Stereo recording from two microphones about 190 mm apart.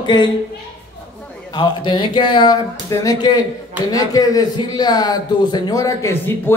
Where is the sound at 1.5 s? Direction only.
25° left (ahead or behind).